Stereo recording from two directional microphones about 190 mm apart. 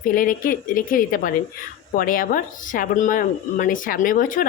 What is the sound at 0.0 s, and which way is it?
Speech, 45° left (ahead or behind).